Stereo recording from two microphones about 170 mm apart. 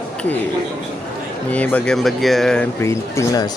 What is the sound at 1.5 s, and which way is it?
Speech, 10° left (ahead or behind).